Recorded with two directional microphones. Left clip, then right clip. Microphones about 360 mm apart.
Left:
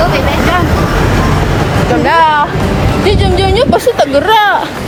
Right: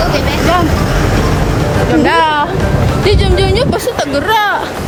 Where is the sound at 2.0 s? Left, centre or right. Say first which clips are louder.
Left 3 dB; centre.